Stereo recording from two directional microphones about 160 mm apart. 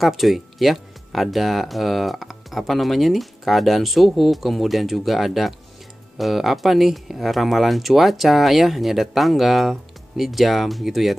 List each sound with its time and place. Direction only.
0.0 s speech: centre (ahead or behind)